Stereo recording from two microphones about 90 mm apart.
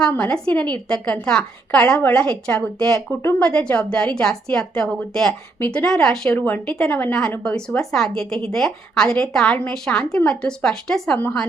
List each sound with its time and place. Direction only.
0.0 s a woman's voice: 10° left (ahead or behind)
6.3 s a woman's voice: 20° left (ahead or behind)